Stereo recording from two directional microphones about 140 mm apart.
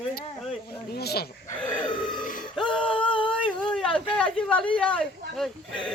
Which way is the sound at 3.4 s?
5° left (ahead or behind).